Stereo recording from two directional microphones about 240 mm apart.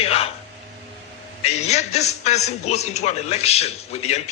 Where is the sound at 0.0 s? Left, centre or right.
Left.